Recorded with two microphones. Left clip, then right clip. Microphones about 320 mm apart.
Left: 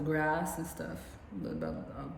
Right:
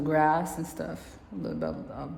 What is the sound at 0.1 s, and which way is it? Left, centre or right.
A woman's voice, centre.